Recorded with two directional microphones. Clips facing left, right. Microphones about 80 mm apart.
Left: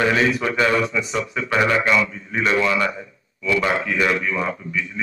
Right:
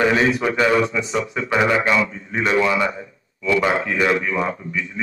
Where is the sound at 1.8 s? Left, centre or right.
Right.